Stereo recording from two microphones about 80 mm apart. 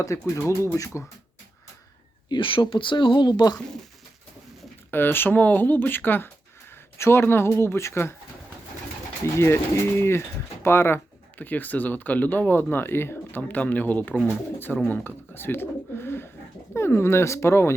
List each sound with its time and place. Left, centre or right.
0.0 s speech: left
2.3 s speech: left
4.9 s speech: left
9.2 s speech: left